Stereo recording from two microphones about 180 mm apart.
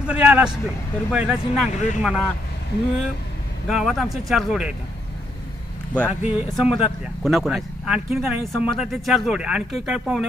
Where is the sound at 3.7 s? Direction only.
Centre (ahead or behind).